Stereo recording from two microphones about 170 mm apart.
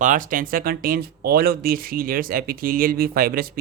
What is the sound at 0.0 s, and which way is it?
Speech, 50° right (ahead or behind).